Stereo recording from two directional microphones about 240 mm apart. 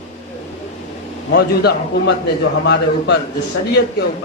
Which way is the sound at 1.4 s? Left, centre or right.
Left.